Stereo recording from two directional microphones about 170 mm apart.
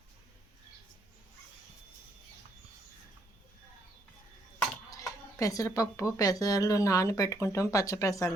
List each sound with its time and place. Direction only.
4.9 s speech: 20° left (ahead or behind)